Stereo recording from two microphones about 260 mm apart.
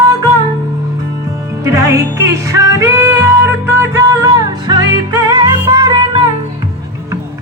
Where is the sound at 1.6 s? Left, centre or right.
Centre.